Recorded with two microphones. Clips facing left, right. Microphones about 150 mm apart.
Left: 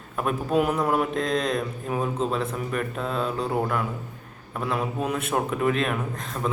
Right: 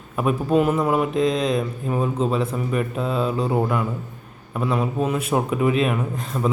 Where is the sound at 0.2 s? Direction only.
Centre (ahead or behind).